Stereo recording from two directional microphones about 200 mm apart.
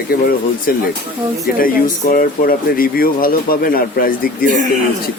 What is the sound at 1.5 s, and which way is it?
Speech, 45° left (ahead or behind).